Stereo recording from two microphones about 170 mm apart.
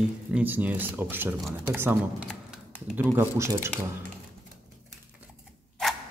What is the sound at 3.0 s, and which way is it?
Speech, 15° right (ahead or behind).